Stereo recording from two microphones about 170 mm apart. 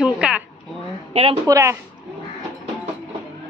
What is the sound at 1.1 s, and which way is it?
Speech, 35° right (ahead or behind).